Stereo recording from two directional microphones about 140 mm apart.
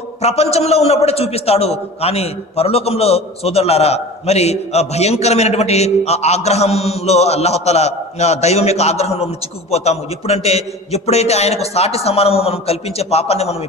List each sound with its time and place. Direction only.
0.2 s a man's voice: 50° left (ahead or behind)